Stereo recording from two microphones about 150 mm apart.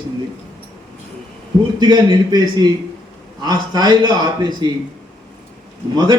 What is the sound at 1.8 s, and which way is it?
A man's voice, 30° right (ahead or behind).